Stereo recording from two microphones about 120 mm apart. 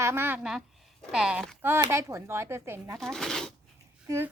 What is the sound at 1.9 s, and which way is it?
A woman's voice, 25° right (ahead or behind).